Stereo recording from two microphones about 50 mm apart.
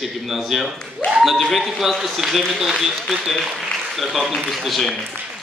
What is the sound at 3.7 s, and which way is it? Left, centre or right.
Applause, centre.